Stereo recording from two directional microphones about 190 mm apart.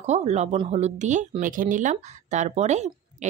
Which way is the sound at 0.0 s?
35° right (ahead or behind).